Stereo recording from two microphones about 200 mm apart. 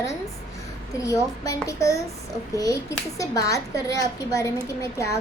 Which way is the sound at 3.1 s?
15° left (ahead or behind).